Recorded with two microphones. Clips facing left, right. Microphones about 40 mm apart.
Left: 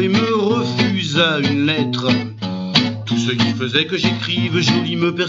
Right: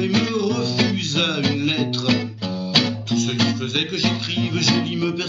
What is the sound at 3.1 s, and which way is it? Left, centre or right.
Music, left.